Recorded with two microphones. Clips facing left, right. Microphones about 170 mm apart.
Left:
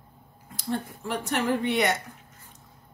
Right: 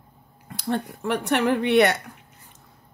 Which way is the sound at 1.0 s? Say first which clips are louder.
Right 6 dB; 65° right (ahead or behind).